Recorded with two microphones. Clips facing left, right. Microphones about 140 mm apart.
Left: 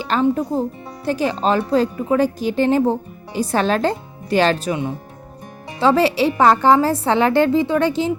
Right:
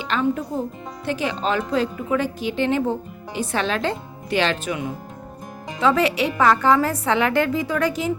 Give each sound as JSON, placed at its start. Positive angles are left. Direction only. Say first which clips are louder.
{"t": 0.0, "sound": "speech", "louder": "left 4 dB", "side_deg": 35}